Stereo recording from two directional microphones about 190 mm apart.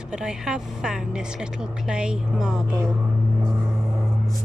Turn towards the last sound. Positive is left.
turn(degrees=0)  # may be behind; listen again after turning